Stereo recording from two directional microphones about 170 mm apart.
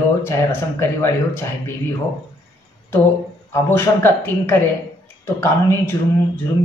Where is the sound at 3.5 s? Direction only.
15° left (ahead or behind).